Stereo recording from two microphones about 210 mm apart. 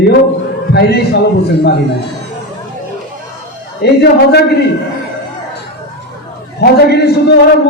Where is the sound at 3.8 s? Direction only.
50° left (ahead or behind).